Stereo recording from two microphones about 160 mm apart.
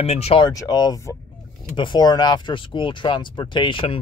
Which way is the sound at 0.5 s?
25° left (ahead or behind).